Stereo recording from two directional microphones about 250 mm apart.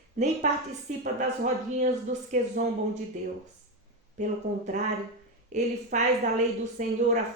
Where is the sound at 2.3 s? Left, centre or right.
Right.